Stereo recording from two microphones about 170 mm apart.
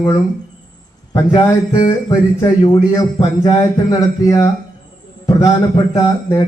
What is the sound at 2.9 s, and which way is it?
Speech, 20° left (ahead or behind).